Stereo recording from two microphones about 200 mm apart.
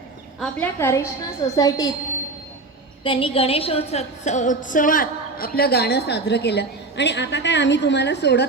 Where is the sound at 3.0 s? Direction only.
25° left (ahead or behind).